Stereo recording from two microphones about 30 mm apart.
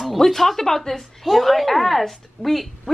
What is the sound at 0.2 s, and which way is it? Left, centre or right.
Speech, centre.